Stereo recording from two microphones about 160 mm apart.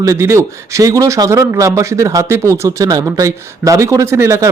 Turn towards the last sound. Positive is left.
turn(degrees=-20)  # may be behind; listen again after turning